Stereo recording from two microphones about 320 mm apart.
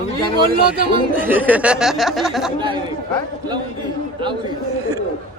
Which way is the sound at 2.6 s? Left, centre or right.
Centre.